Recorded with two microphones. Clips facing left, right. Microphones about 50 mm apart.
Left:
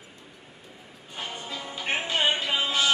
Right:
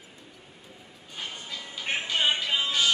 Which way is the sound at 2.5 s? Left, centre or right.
Centre.